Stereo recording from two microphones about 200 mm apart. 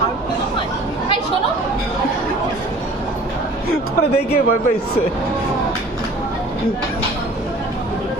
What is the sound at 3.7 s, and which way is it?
Speech, 50° left (ahead or behind).